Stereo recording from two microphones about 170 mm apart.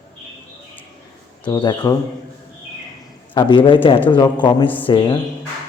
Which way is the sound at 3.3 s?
30° left (ahead or behind).